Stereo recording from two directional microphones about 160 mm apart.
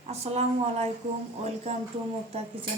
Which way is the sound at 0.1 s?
40° right (ahead or behind).